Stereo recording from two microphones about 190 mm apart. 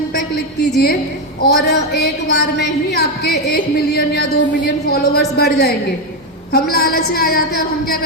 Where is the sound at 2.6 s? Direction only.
55° left (ahead or behind).